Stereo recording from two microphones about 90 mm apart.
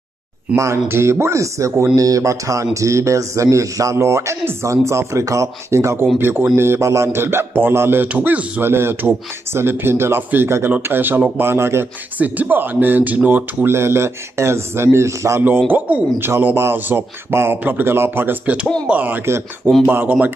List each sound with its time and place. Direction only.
0.6 s a man's voice: 30° right (ahead or behind)